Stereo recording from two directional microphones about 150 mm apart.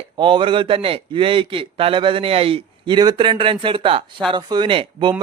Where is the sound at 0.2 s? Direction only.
35° right (ahead or behind).